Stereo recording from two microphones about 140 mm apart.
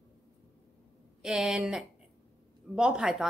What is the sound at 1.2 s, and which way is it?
A woman's voice, 5° right (ahead or behind).